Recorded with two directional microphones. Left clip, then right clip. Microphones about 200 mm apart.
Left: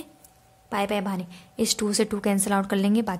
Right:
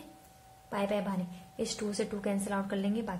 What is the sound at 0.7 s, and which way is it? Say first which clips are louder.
A woman's voice: left 6 dB; 45° left (ahead or behind).